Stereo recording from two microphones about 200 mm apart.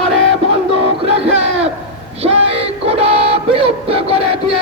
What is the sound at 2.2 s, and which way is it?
Music, 30° right (ahead or behind).